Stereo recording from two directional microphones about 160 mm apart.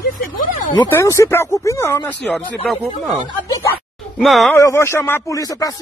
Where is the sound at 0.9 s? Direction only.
15° left (ahead or behind).